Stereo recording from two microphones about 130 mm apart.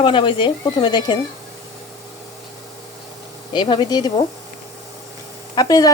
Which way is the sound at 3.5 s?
35° left (ahead or behind).